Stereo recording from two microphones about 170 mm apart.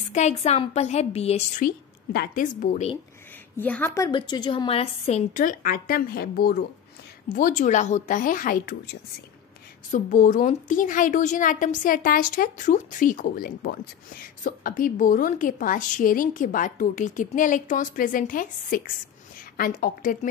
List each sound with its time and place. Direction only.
0.1 s a woman's voice: 40° left (ahead or behind)
1.6 s a woman's voice: 55° left (ahead or behind)
3.5 s a woman's voice: 10° left (ahead or behind)
4.1 s a woman's voice: 25° left (ahead or behind)
5.3 s a woman's voice: 50° left (ahead or behind)
7.2 s a woman's voice: 50° left (ahead or behind)
9.8 s a woman's voice: 50° left (ahead or behind)